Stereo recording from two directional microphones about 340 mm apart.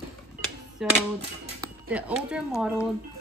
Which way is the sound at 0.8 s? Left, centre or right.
Centre.